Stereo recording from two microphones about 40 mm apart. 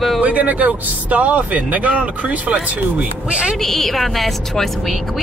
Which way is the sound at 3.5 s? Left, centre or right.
Centre.